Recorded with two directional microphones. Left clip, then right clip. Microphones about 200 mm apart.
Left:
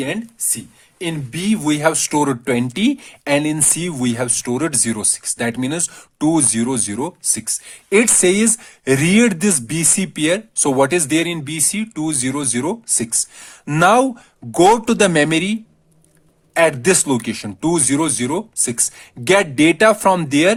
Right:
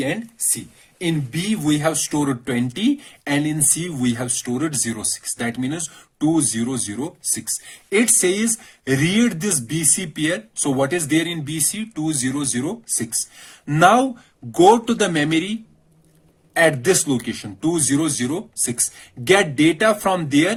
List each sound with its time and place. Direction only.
0.9 s speech: 40° left (ahead or behind)
16.6 s speech: 40° left (ahead or behind)